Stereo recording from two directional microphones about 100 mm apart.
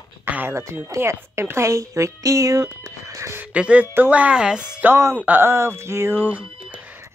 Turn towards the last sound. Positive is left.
turn(degrees=-15)  # may be behind; listen again after turning